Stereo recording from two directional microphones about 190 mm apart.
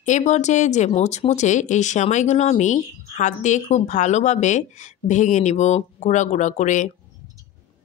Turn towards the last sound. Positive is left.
turn(degrees=40)  # may be behind; listen again after turning